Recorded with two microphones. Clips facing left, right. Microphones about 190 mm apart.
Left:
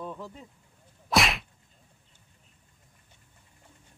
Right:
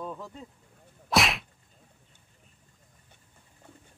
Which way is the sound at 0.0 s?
Centre (ahead or behind).